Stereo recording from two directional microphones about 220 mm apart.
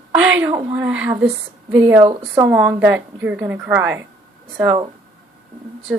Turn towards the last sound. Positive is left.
turn(degrees=-15)  # may be behind; listen again after turning